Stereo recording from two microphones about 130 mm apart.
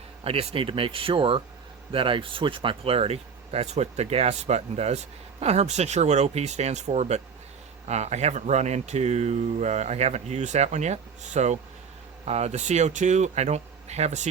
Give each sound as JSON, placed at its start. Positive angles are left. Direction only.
{"t": 0.3, "sound": "speech", "side_deg": -45}